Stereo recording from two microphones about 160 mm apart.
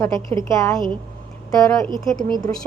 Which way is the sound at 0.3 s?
20° left (ahead or behind).